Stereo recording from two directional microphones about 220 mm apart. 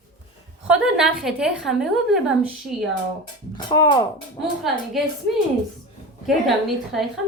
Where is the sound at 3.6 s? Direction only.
20° left (ahead or behind).